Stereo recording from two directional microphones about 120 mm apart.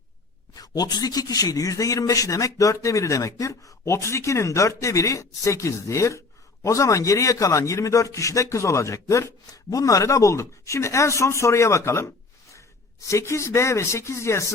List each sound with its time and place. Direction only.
0.5 s a man's voice: 30° left (ahead or behind)
13.1 s a man's voice: 25° left (ahead or behind)